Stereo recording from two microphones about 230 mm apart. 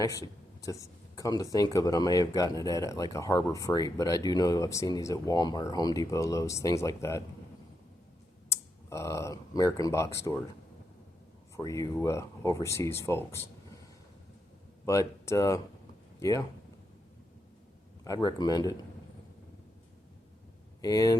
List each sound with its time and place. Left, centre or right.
0.0 s speech: centre
8.4 s speech: centre
11.5 s speech: centre
14.8 s speech: centre
18.0 s speech: centre
20.8 s speech: centre